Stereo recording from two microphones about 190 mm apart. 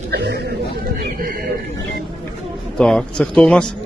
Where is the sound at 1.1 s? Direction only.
50° right (ahead or behind).